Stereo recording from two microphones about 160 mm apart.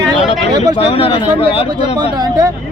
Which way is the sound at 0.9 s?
35° left (ahead or behind).